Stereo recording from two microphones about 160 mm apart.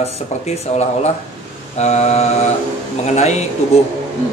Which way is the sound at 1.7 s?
45° left (ahead or behind).